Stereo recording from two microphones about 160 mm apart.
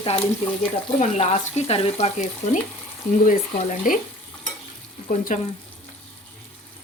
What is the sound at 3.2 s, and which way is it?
Speech, 55° left (ahead or behind).